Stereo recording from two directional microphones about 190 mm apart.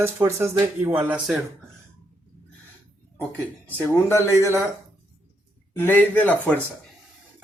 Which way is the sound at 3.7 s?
10° left (ahead or behind).